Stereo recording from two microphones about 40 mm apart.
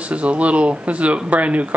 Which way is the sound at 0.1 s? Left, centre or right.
Right.